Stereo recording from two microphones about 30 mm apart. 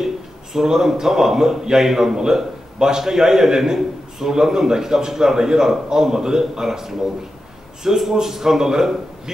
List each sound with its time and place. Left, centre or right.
0.0 s a man's voice: centre
8.0 s a man's voice: centre